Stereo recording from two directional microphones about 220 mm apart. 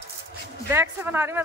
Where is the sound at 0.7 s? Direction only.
10° right (ahead or behind).